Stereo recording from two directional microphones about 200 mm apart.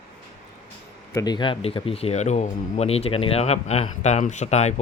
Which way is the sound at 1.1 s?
20° left (ahead or behind).